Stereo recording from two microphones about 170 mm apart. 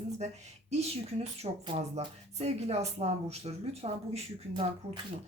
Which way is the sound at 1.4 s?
35° right (ahead or behind).